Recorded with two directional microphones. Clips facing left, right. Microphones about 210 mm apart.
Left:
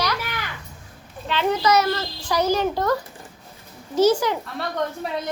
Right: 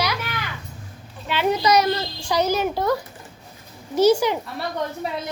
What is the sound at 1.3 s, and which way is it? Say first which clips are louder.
A child's voice: right 1 dB; 10° right (ahead or behind).